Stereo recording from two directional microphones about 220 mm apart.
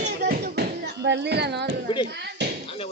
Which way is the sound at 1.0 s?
50° right (ahead or behind).